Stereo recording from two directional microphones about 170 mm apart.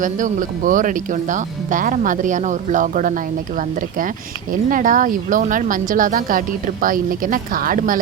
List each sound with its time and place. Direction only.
0.0 s speech: 50° right (ahead or behind)
4.7 s a woman's voice: 50° right (ahead or behind)